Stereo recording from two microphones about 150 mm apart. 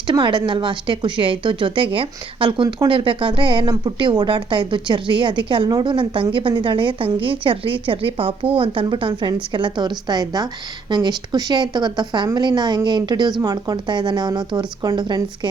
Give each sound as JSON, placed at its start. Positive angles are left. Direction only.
{"t": 0.1, "sound": "a woman's voice", "side_deg": -30}